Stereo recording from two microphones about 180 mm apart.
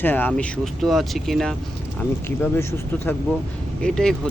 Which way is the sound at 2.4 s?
15° left (ahead or behind).